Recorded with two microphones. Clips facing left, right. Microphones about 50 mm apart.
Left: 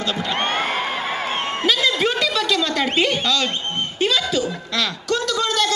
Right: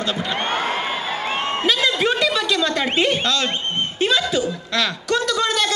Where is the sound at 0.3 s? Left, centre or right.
Left.